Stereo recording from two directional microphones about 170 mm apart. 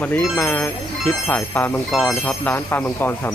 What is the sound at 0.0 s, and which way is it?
Speech, 10° left (ahead or behind).